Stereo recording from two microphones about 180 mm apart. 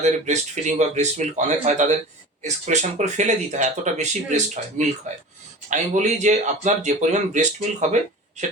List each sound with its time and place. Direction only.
0.0 s speech: 40° right (ahead or behind)